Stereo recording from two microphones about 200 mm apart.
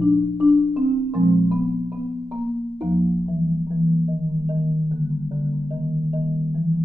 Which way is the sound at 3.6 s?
15° right (ahead or behind).